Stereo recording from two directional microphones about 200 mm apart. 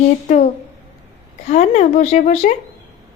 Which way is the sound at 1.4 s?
35° left (ahead or behind).